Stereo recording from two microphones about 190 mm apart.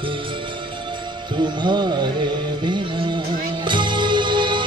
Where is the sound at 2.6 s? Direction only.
25° right (ahead or behind).